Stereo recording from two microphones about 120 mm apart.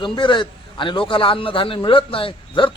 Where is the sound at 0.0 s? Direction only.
45° left (ahead or behind).